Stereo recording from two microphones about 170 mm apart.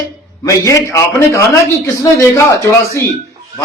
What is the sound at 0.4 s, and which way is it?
Speech, 20° left (ahead or behind).